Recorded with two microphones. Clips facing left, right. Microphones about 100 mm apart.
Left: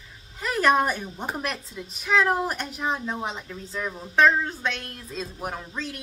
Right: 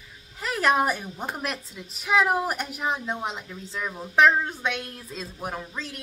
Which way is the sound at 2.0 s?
10° right (ahead or behind).